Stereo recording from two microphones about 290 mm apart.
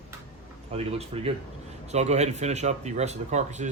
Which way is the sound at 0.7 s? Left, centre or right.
Right.